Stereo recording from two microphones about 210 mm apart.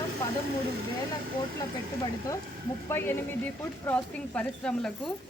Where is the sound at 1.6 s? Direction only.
15° left (ahead or behind).